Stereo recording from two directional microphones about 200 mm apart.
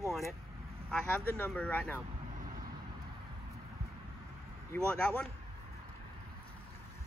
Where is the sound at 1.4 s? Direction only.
5° left (ahead or behind).